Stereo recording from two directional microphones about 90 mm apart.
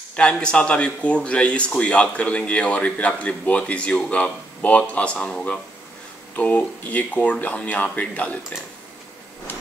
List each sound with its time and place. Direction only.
0.1 s a man's voice: 10° left (ahead or behind)